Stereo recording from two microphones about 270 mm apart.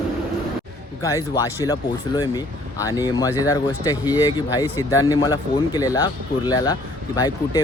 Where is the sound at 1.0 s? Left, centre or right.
Centre.